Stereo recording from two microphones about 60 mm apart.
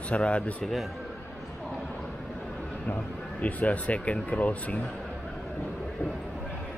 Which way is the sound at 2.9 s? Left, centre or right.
Left.